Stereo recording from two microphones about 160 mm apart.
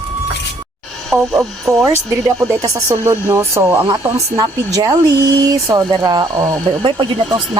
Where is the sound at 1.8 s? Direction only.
20° right (ahead or behind).